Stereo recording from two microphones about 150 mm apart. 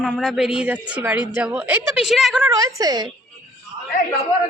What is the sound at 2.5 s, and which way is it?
Speech, 20° right (ahead or behind).